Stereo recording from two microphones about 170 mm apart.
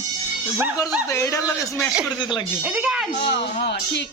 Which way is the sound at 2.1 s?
25° left (ahead or behind).